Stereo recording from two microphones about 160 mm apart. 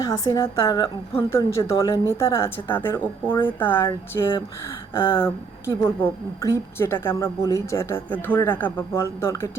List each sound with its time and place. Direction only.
0.0 s a woman's voice: 20° left (ahead or behind)